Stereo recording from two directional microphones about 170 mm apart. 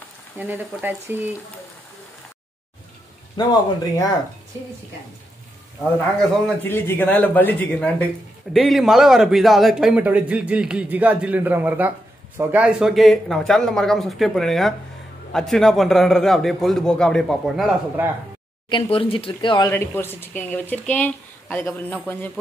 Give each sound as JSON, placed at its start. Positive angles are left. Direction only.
{"t": 0.4, "sound": "a man's voice", "side_deg": -10}
{"t": 3.3, "sound": "a man's voice", "side_deg": 25}
{"t": 6.6, "sound": "a man's voice", "side_deg": 10}
{"t": 18.0, "sound": "a man's voice", "side_deg": -10}
{"t": 18.7, "sound": "speech", "side_deg": 30}
{"t": 19.7, "sound": "speech", "side_deg": 15}